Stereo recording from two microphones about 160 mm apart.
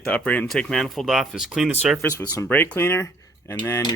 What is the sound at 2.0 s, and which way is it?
Speech, 20° left (ahead or behind).